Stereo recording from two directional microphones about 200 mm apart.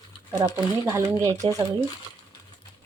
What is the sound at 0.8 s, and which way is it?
Speech, 15° right (ahead or behind).